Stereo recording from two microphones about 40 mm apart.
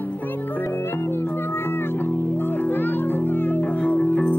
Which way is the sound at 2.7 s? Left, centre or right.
Left.